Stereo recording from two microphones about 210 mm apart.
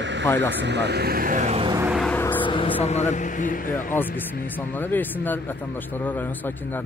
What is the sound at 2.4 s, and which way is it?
Speech, 25° left (ahead or behind).